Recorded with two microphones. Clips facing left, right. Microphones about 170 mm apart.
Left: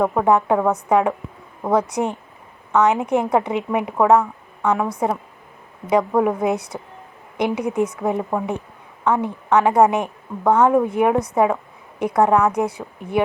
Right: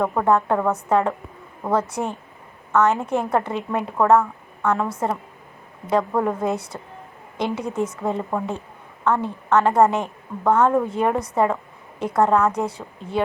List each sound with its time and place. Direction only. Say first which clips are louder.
0.0 s a woman's voice: left 2 dB; 10° left (ahead or behind)